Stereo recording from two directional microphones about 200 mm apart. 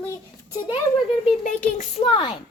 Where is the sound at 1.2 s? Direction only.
40° left (ahead or behind).